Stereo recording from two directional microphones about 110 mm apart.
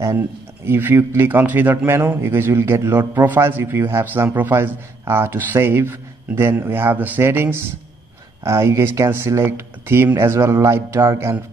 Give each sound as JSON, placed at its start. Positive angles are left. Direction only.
{"t": 0.7, "sound": "a man's voice", "side_deg": -20}